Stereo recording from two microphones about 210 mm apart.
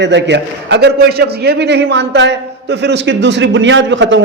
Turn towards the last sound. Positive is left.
turn(degrees=-60)  # may be behind; listen again after turning